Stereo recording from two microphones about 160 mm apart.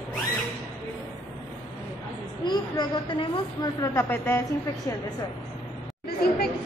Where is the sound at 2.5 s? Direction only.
25° left (ahead or behind).